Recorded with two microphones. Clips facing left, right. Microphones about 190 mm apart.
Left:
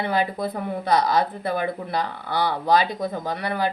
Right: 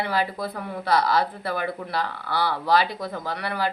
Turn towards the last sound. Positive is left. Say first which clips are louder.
# left 2 dB
turn(degrees=20)  # may be behind; listen again after turning